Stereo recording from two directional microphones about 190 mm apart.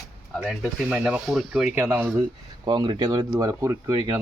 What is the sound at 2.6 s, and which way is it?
Speech, 25° right (ahead or behind).